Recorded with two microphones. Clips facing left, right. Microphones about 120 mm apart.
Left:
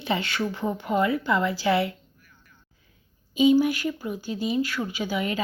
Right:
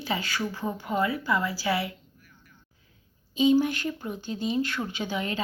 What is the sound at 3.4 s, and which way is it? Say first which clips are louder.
Speech: left 3 dB; 10° left (ahead or behind).